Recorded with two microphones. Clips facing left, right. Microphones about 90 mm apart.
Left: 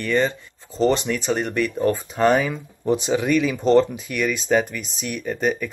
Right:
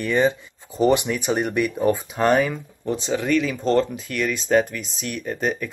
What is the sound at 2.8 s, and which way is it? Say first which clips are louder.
Speech: left 4 dB; 10° left (ahead or behind).